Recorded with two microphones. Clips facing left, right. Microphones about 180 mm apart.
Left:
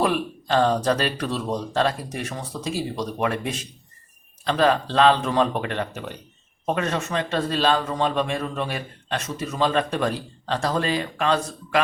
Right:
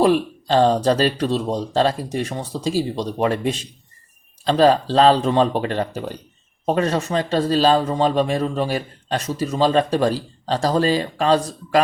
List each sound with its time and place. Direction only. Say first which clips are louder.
0.0 s a man's voice: right 6 dB; 30° right (ahead or behind)